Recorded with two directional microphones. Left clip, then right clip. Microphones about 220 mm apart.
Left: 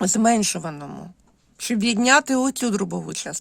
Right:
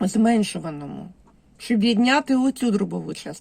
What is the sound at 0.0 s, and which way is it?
Speech, 40° left (ahead or behind).